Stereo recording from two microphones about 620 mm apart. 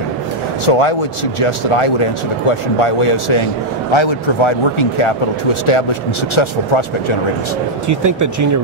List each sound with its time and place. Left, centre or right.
0.7 s speech: left
7.9 s speech: right